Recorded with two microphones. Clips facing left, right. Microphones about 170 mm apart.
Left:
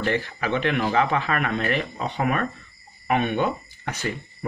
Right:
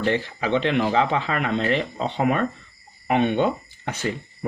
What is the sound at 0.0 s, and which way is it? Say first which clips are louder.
Speech: right 2 dB; 25° right (ahead or behind).